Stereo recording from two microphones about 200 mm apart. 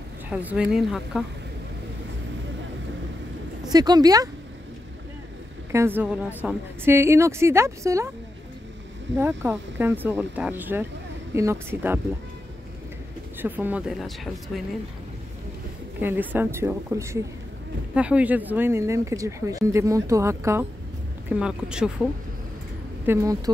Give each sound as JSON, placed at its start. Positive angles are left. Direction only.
{"t": 0.3, "sound": "speech", "side_deg": -5}
{"t": 3.7, "sound": "speech", "side_deg": -20}
{"t": 5.7, "sound": "speech", "side_deg": -10}
{"t": 9.1, "sound": "speech", "side_deg": -15}
{"t": 13.4, "sound": "speech", "side_deg": -10}
{"t": 16.0, "sound": "speech", "side_deg": -10}
{"t": 23.0, "sound": "speech", "side_deg": -15}